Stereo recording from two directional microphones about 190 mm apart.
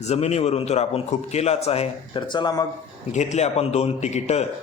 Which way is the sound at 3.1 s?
35° left (ahead or behind).